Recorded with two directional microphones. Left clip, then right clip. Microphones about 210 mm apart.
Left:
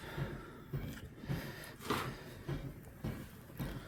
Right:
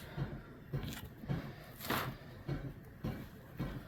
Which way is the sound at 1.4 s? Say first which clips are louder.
Left 2 dB; 50° left (ahead or behind).